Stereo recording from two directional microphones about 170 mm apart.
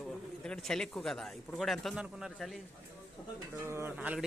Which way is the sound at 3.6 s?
15° right (ahead or behind).